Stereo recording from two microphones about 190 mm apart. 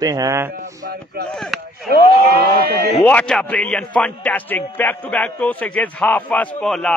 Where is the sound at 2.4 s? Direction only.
55° right (ahead or behind).